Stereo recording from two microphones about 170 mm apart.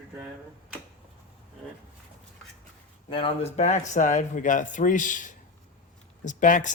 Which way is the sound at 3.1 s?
35° left (ahead or behind).